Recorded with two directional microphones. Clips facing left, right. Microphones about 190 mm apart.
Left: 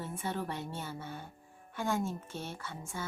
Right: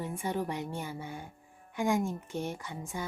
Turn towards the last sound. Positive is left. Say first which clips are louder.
# right 3 dB
turn(degrees=-15)  # may be behind; listen again after turning